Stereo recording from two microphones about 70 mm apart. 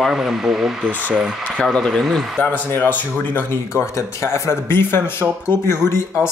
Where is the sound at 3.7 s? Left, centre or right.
Left.